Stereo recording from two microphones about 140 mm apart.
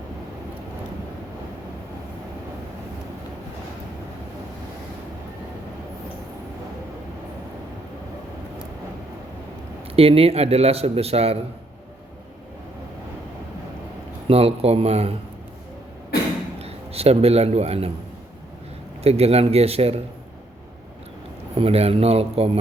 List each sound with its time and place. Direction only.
9.9 s a man's voice: 45° right (ahead or behind)
14.3 s a man's voice: 45° right (ahead or behind)
16.6 s a man's voice: 45° right (ahead or behind)
19.0 s a man's voice: 50° right (ahead or behind)
21.5 s a man's voice: 45° right (ahead or behind)